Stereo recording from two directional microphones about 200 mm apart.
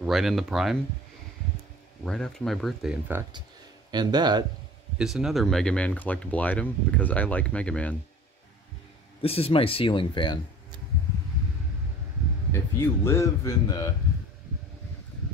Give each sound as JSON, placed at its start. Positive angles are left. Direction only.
{"t": 0.0, "sound": "speech", "side_deg": 0}
{"t": 2.0, "sound": "speech", "side_deg": 5}
{"t": 3.9, "sound": "speech", "side_deg": -20}
{"t": 4.9, "sound": "speech", "side_deg": 0}
{"t": 9.2, "sound": "speech", "side_deg": 30}
{"t": 12.5, "sound": "speech", "side_deg": 15}